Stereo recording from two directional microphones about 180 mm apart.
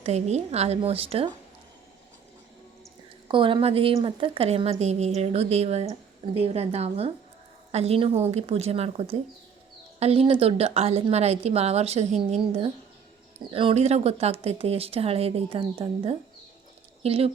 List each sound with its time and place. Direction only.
0.0 s a woman's voice: 40° right (ahead or behind)
3.2 s a woman's voice: 30° right (ahead or behind)